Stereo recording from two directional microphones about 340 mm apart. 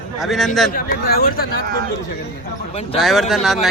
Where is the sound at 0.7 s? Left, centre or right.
Left.